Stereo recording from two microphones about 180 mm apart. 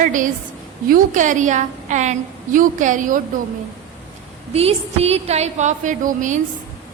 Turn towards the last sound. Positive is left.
turn(degrees=-45)  # may be behind; listen again after turning